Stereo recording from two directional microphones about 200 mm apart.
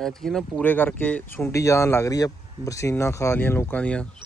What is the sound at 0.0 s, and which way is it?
Speech, centre (ahead or behind).